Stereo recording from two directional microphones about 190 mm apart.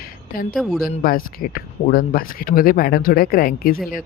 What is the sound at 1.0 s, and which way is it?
Speech, 50° left (ahead or behind).